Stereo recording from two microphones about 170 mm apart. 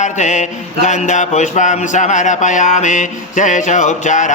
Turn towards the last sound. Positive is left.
turn(degrees=45)  # may be behind; listen again after turning